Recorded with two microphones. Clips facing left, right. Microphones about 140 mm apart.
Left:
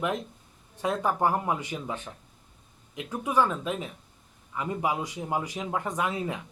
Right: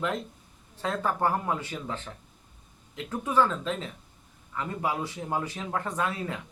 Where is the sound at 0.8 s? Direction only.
15° left (ahead or behind).